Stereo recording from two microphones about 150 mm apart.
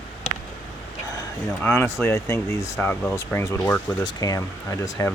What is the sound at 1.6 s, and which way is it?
Speech, 15° left (ahead or behind).